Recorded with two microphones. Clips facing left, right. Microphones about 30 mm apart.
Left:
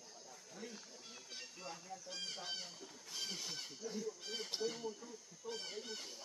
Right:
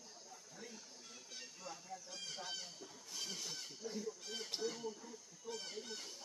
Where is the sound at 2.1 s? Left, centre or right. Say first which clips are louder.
Left 3 dB; left.